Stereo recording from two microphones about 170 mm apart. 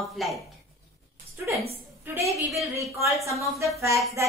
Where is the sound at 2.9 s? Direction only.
15° right (ahead or behind).